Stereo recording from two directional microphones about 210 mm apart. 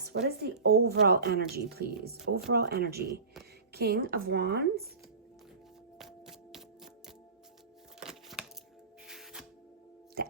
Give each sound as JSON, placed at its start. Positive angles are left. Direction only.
{"t": 0.0, "sound": "a woman's voice", "side_deg": -50}
{"t": 6.0, "sound": "music", "side_deg": 0}
{"t": 7.9, "sound": "a sound", "side_deg": -5}
{"t": 9.0, "sound": "music", "side_deg": 0}